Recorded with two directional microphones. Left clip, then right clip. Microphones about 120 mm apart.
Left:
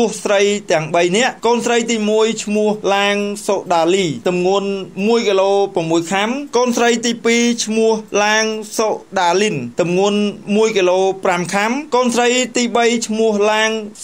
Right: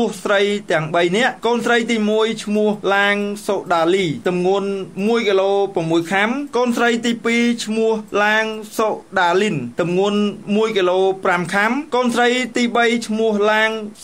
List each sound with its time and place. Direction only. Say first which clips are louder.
0.0 s a man's voice: left 3 dB; 20° left (ahead or behind)